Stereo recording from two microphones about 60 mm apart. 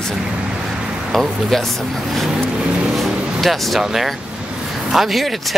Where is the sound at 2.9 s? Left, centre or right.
Centre.